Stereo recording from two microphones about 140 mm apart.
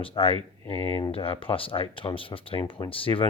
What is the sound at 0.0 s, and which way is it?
Speech, 40° left (ahead or behind).